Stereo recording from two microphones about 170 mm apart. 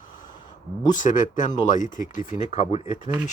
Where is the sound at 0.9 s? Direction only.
50° left (ahead or behind).